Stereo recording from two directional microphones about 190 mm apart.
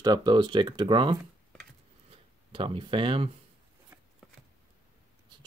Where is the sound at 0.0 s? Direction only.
20° right (ahead or behind).